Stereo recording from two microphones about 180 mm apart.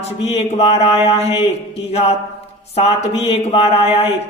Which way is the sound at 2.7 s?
35° left (ahead or behind).